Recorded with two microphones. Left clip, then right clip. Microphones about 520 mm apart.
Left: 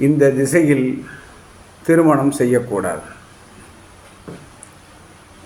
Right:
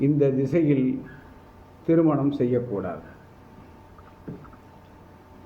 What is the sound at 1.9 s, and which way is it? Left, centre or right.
A man's voice, right.